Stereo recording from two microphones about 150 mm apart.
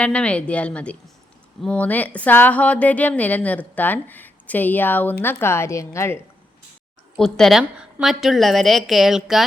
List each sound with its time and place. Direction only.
0.0 s a woman's voice: 10° left (ahead or behind)
7.2 s a woman's voice: 5° left (ahead or behind)